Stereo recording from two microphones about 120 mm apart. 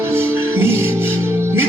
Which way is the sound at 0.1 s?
20° right (ahead or behind).